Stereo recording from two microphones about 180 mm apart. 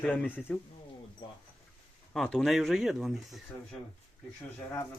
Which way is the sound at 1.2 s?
25° left (ahead or behind).